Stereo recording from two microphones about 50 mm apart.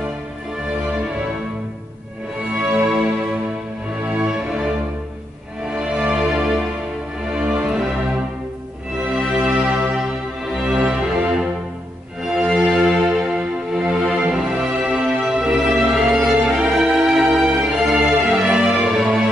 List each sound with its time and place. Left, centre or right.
2.5 s music: centre
4.2 s music: centre
5.8 s music: centre
9.1 s music: centre
10.5 s music: centre
12.4 s music: centre
16.3 s music: right